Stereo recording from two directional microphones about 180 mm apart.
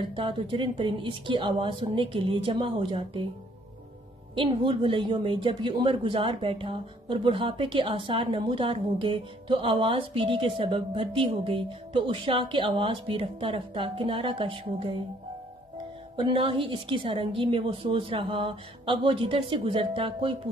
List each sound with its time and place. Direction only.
0.1 s a woman's voice: 30° right (ahead or behind)
4.4 s a woman's voice: 30° right (ahead or behind)
16.2 s a woman's voice: 30° right (ahead or behind)